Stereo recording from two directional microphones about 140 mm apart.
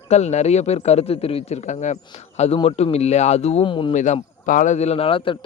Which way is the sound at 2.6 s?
45° left (ahead or behind).